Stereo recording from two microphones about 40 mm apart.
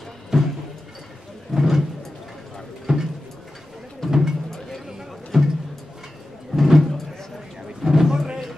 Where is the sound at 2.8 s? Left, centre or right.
Centre.